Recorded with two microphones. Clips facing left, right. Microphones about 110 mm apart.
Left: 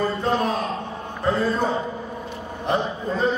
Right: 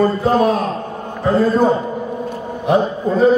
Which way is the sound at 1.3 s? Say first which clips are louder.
Right 9 dB; 45° right (ahead or behind).